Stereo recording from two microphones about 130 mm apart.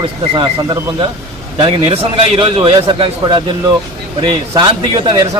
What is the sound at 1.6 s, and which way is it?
A man's voice, 45° right (ahead or behind).